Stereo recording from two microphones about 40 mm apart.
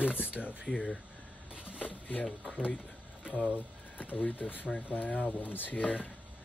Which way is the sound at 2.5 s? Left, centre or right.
Left.